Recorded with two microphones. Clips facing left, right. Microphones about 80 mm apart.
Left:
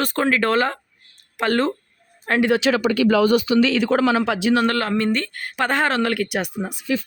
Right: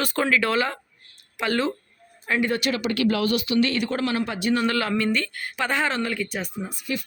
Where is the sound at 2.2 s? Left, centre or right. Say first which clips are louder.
Left 5 dB; left.